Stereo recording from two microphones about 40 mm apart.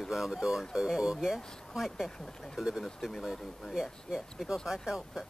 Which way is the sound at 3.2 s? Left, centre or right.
Centre.